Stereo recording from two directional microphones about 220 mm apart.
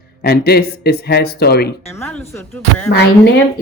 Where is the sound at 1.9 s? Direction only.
10° left (ahead or behind).